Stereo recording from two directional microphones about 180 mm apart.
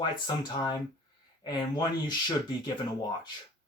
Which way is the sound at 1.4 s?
25° left (ahead or behind).